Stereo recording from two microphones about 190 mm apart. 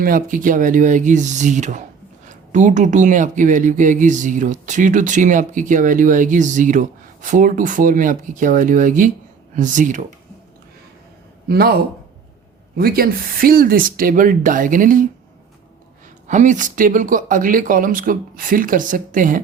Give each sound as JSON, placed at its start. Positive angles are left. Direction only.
{"t": 0.0, "sound": "speech", "side_deg": -45}
{"t": 11.4, "sound": "speech", "side_deg": -55}
{"t": 16.2, "sound": "speech", "side_deg": -40}